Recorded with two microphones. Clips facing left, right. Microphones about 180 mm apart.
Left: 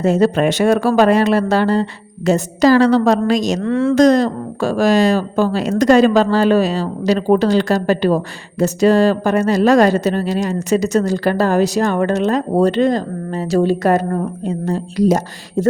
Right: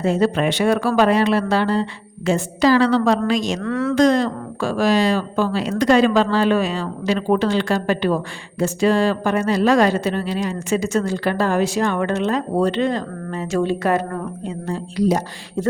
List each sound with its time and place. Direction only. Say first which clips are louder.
0.0 s speech: left 4 dB; 40° left (ahead or behind)
3.6 s speech: left 5 dB; 25° left (ahead or behind)
3.9 s speech: left 4 dB; 40° left (ahead or behind)